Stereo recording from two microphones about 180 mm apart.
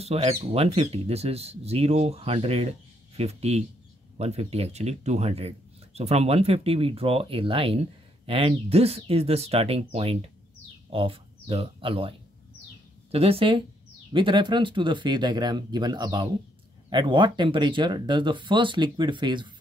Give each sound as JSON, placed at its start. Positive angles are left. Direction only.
{"t": 0.0, "sound": "speech", "side_deg": -35}